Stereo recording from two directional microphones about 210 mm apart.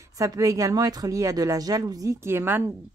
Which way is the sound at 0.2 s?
15° right (ahead or behind).